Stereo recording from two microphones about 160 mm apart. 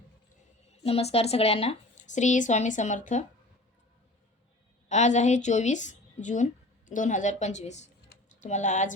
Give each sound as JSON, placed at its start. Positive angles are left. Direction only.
{"t": 0.7, "sound": "a woman's voice", "side_deg": 40}
{"t": 4.9, "sound": "a woman's voice", "side_deg": 45}
{"t": 8.1, "sound": "typing", "side_deg": 50}